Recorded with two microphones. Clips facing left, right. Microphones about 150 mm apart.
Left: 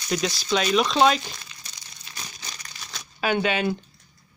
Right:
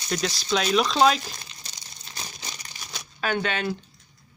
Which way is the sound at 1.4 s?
30° right (ahead or behind).